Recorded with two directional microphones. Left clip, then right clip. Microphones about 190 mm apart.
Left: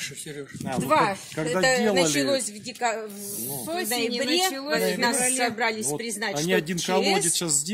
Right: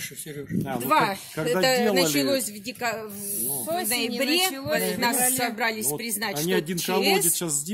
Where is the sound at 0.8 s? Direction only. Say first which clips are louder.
Left 1 dB; 50° right (ahead or behind).